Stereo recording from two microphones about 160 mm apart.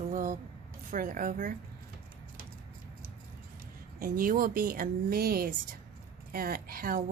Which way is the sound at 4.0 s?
60° right (ahead or behind).